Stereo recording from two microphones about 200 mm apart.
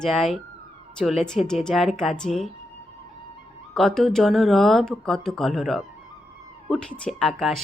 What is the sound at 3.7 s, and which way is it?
Speech, centre (ahead or behind).